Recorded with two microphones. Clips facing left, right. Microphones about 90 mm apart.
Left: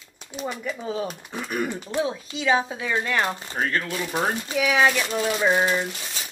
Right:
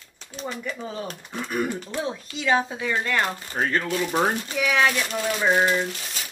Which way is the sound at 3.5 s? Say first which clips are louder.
Right 2 dB; 20° right (ahead or behind).